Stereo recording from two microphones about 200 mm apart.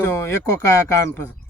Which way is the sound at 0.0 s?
15° left (ahead or behind).